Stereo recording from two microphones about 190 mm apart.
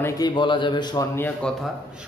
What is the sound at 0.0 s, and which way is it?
A man's voice, 20° left (ahead or behind).